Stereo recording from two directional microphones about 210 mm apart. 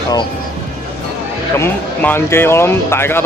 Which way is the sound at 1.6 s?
10° left (ahead or behind).